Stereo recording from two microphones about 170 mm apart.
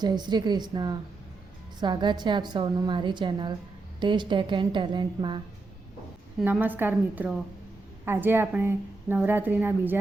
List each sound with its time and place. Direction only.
0.0 s a woman's voice: 25° right (ahead or behind)
6.4 s a woman's voice: 10° right (ahead or behind)